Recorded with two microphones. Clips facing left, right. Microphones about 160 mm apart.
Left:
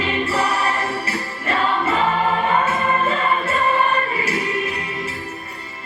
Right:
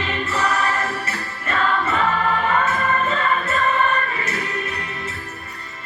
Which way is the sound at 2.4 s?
30° left (ahead or behind).